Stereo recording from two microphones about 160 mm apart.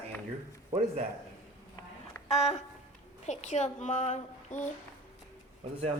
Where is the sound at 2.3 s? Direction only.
45° left (ahead or behind).